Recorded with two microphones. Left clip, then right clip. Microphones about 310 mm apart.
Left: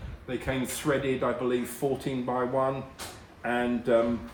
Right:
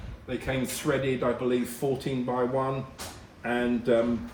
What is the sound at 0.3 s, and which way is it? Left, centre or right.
Speech, centre.